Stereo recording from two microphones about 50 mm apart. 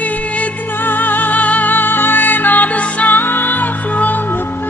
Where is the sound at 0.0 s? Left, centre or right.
Left.